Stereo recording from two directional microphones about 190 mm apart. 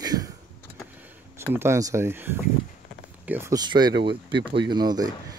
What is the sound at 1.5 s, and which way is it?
Speech, 15° right (ahead or behind).